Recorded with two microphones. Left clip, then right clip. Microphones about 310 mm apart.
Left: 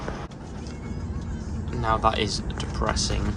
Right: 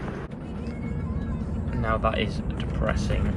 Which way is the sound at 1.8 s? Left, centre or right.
Centre.